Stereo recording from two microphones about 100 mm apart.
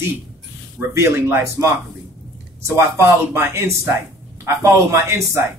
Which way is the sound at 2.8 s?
25° right (ahead or behind).